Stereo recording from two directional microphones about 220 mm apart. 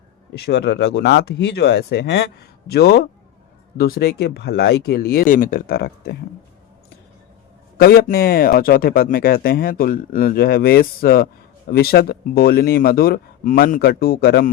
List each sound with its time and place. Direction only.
0.3 s speech: 45° left (ahead or behind)
7.8 s speech: 45° left (ahead or behind)